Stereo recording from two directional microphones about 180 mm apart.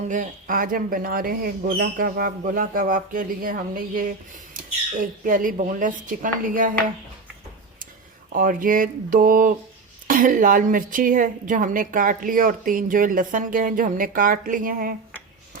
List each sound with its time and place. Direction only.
0.1 s a woman's voice: 45° right (ahead or behind)
8.3 s a woman's voice: 50° right (ahead or behind)